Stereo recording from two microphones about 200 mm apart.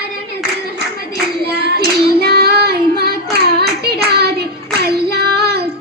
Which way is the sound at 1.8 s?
50° right (ahead or behind).